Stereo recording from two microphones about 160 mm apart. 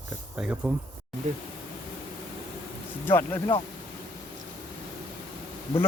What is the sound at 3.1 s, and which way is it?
Speech, 15° left (ahead or behind).